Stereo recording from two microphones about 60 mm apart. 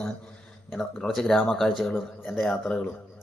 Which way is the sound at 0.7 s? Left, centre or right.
Centre.